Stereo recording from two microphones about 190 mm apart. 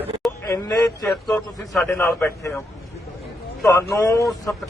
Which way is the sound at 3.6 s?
15° left (ahead or behind).